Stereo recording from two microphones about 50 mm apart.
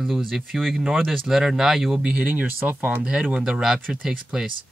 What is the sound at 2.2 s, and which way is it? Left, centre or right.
Speech, right.